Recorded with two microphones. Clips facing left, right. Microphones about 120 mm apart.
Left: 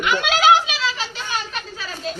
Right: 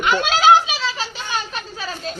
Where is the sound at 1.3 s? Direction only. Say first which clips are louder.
Right 1 dB; 30° right (ahead or behind).